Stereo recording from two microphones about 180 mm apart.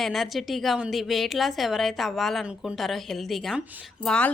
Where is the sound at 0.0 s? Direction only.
Centre (ahead or behind).